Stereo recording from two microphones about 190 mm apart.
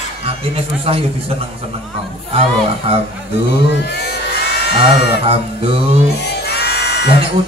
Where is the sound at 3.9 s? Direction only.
60° left (ahead or behind).